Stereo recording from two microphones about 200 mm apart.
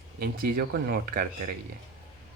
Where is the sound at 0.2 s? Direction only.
50° right (ahead or behind).